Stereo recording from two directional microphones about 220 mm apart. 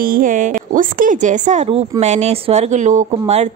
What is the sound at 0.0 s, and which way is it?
A woman's voice, 40° right (ahead or behind).